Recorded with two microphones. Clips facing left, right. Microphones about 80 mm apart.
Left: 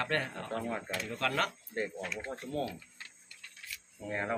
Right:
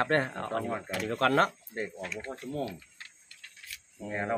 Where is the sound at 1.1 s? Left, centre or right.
Right.